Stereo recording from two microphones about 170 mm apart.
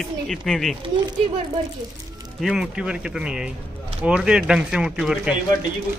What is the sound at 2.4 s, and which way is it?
Speech, 5° right (ahead or behind).